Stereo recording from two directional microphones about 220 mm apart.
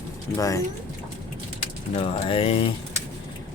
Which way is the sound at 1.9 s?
25° left (ahead or behind).